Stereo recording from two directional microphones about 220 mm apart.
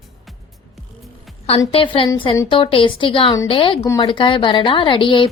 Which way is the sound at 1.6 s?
25° left (ahead or behind).